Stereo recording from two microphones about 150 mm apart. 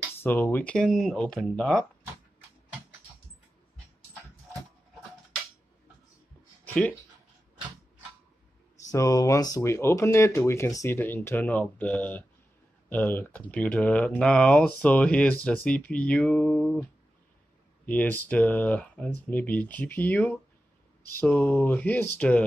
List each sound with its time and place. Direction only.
0.2 s speech: 15° left (ahead or behind)
6.6 s a sound: 10° left (ahead or behind)
8.8 s speech: 20° left (ahead or behind); by 16.8 s 5° left (ahead or behind)
17.8 s speech: 10° left (ahead or behind)